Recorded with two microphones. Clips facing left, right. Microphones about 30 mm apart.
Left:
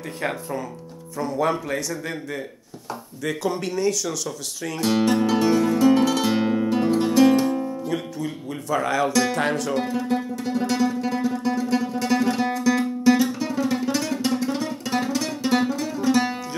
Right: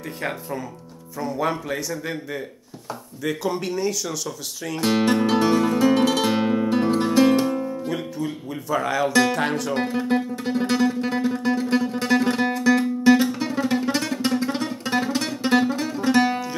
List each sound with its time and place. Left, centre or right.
0.2 s speech: centre
4.7 s music: centre
7.9 s speech: centre
9.8 s music: right